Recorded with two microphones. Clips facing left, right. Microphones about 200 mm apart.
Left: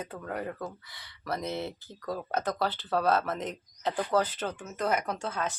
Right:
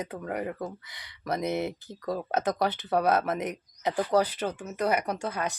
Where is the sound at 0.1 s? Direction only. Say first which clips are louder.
Right 3 dB; 10° right (ahead or behind).